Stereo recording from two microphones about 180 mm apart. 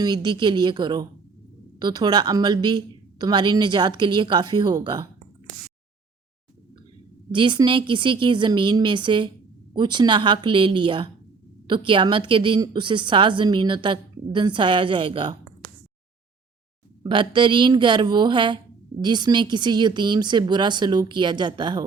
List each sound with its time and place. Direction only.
0.0 s a woman's voice: 25° right (ahead or behind)
7.3 s a woman's voice: 25° right (ahead or behind)
17.0 s a woman's voice: 25° right (ahead or behind)